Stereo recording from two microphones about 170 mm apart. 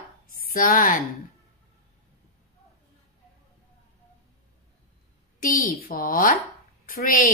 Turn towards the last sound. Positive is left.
turn(degrees=55)  # may be behind; listen again after turning